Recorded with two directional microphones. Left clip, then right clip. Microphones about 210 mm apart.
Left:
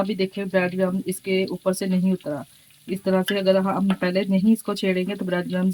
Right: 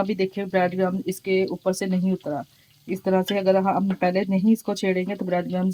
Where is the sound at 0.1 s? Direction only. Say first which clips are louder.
Even; centre (ahead or behind).